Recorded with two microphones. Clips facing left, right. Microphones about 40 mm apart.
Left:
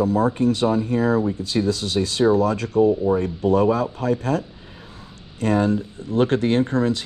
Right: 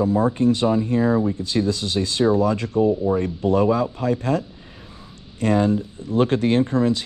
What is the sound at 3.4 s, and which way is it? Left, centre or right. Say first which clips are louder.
Speech: even; left.